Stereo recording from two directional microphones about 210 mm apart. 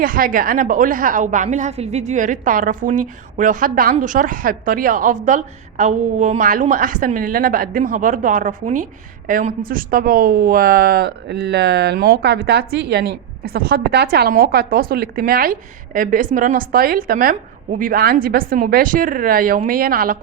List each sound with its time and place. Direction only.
0.0 s a woman's voice: 40° right (ahead or behind)